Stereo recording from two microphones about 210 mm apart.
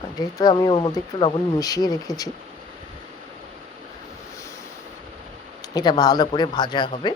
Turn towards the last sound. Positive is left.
turn(degrees=20)  # may be behind; listen again after turning